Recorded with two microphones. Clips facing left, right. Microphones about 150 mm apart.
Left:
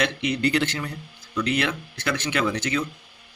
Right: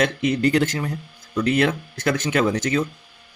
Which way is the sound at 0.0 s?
45° right (ahead or behind).